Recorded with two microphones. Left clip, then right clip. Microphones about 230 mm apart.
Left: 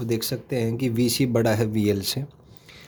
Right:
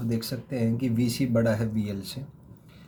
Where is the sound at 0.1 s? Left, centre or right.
Left.